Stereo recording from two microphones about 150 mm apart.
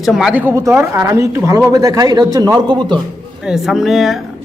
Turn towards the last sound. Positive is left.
turn(degrees=0)  # may be behind; listen again after turning